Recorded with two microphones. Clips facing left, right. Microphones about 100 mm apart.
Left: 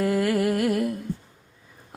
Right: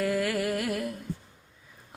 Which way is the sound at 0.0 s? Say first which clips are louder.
Left 4 dB; 45° left (ahead or behind).